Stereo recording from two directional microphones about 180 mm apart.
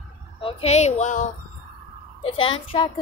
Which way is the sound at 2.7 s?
30° left (ahead or behind).